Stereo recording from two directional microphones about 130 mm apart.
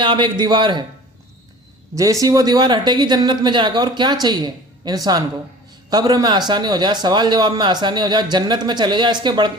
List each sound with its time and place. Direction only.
0.0 s speech: 35° right (ahead or behind)
2.0 s speech: 25° right (ahead or behind)